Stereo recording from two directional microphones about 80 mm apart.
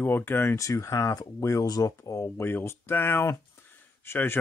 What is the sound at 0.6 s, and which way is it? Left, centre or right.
Speech, left.